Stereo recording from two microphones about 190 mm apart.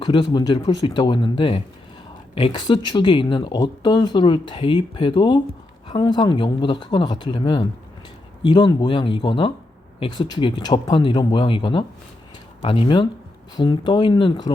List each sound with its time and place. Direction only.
0.0 s speech: 25° left (ahead or behind)